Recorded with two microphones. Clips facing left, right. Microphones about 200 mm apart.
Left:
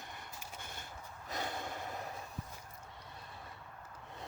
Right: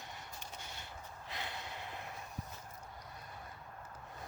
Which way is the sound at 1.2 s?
45° left (ahead or behind).